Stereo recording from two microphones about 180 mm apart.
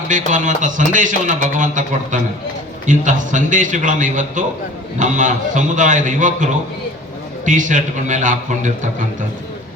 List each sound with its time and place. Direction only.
0.1 s a man's voice: 45° right (ahead or behind)